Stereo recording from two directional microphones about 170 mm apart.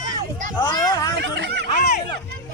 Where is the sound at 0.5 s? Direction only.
20° left (ahead or behind).